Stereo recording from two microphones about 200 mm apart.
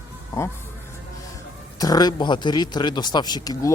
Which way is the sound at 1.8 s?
20° left (ahead or behind).